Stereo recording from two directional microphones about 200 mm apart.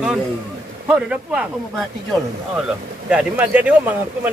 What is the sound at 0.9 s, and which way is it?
Speech, 5° right (ahead or behind).